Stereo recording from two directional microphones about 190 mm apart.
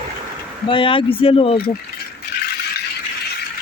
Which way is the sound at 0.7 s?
25° left (ahead or behind).